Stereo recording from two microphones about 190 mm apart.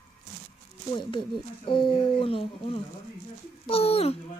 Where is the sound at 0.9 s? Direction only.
25° left (ahead or behind).